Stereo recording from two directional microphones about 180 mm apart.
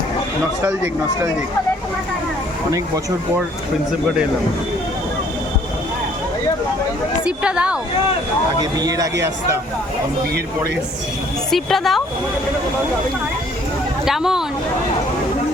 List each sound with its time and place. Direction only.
7.3 s a woman's voice: 5° right (ahead or behind)
8.6 s speech: 20° right (ahead or behind)
11.5 s a woman's voice: centre (ahead or behind)
14.0 s a woman's voice: centre (ahead or behind)